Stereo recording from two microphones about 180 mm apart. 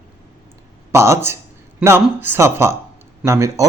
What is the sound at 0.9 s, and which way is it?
A man's voice, 15° right (ahead or behind).